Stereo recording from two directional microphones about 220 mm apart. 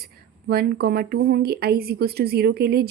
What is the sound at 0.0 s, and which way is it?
Speech, 45° right (ahead or behind).